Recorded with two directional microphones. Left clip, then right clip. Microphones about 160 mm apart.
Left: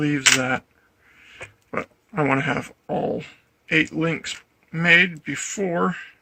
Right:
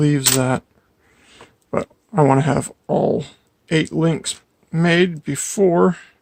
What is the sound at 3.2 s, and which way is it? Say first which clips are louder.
Speech: right 4 dB; 90° right.